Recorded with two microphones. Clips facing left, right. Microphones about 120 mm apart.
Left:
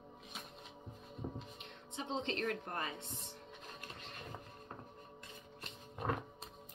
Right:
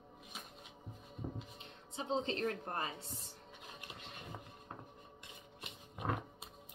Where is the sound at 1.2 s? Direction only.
Centre (ahead or behind).